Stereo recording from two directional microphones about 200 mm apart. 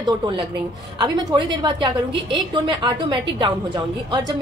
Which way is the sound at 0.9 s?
20° right (ahead or behind).